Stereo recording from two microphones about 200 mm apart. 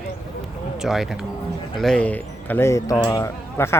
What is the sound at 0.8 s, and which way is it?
A man's voice, centre (ahead or behind).